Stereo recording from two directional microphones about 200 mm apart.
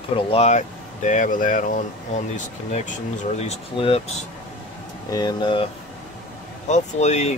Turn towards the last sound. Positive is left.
turn(degrees=35)  # may be behind; listen again after turning